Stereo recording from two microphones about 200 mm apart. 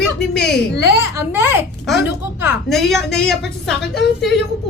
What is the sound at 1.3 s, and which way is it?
Speech, 10° right (ahead or behind).